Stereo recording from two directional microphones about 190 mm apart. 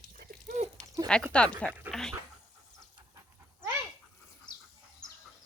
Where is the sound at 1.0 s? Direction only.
20° right (ahead or behind).